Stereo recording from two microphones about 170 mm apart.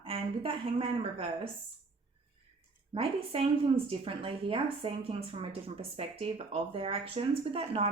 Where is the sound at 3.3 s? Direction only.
35° right (ahead or behind).